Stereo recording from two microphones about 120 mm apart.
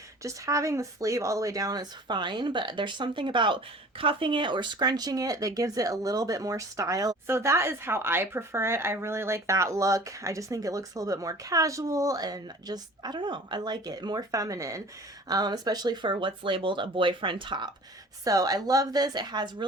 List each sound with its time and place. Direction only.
0.2 s speech: 25° right (ahead or behind); by 17.7 s 40° right (ahead or behind)
18.3 s speech: 30° right (ahead or behind)